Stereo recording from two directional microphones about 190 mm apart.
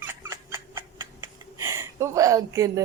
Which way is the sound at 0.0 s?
10° right (ahead or behind).